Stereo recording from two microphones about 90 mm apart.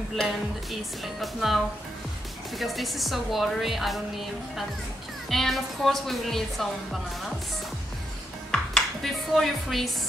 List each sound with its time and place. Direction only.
0.1 s a woman's voice: centre (ahead or behind)
2.6 s a woman's voice: centre (ahead or behind)
5.3 s a woman's voice: 5° left (ahead or behind)
8.5 s dishes: 10° left (ahead or behind)
9.3 s a woman's voice: centre (ahead or behind)